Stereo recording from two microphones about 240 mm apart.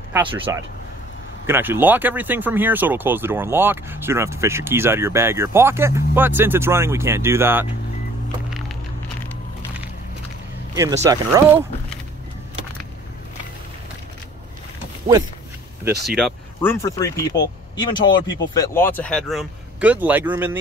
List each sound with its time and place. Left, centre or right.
0.1 s speech: centre
10.7 s speech: centre
16.2 s speech: centre
16.8 s speech: centre